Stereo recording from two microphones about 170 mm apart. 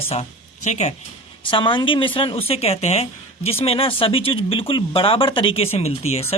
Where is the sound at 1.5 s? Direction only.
30° left (ahead or behind).